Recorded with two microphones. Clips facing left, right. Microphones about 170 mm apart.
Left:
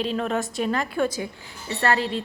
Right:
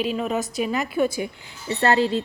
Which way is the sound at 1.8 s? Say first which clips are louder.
Right 4 dB; 25° right (ahead or behind).